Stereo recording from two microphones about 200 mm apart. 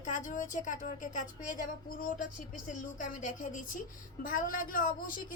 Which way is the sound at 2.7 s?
40° left (ahead or behind).